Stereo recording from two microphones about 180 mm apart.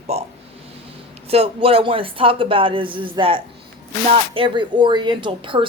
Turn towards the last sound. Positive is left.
turn(degrees=-25)  # may be behind; listen again after turning